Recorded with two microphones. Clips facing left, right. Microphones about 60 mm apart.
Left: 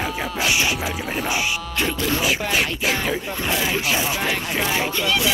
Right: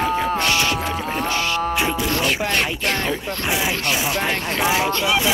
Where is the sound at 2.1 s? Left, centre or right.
Centre.